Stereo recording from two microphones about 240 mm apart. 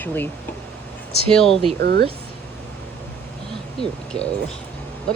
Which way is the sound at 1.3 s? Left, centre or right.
Centre.